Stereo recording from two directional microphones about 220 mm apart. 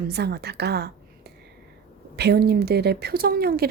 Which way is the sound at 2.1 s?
45° right (ahead or behind).